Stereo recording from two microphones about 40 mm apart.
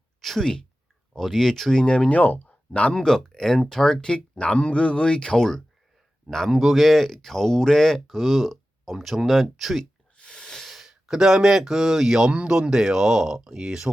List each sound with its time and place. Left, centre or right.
0.2 s a sound: centre
1.1 s speech: centre
1.8 s speech: left
2.0 s speech: left
2.9 s speech: centre
4.1 s speech: left
6.5 s speech: centre
10.2 s a sound: left
10.6 s a sound: centre
11.1 s speech: centre
12.3 s speech: right
12.7 s speech: centre